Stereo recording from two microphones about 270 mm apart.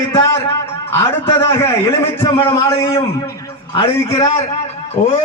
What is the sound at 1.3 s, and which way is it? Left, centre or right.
A man's voice, centre.